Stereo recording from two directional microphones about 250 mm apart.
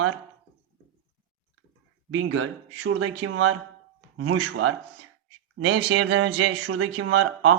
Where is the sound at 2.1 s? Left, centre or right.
Right.